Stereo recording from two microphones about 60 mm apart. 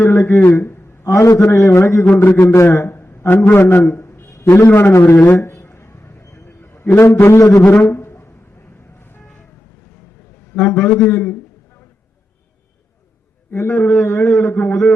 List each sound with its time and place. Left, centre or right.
0.0 s a man's voice: left
0.4 s a sound: left
1.1 s a man's voice: left
2.1 s a man's voice: left
2.7 s a sound: left
3.4 s a man's voice: left
3.8 s a man's voice: left
5.0 s a sound: left
7.0 s a man's voice: left
7.6 s a sound: left
10.8 s a man's voice: left
13.5 s a man's voice: left
14.0 s a man's voice: left